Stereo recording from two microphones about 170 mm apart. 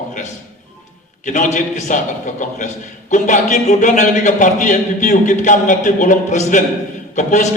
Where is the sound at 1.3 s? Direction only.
45° left (ahead or behind).